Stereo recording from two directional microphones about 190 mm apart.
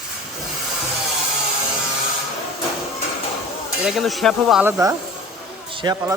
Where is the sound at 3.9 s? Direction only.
Centre (ahead or behind).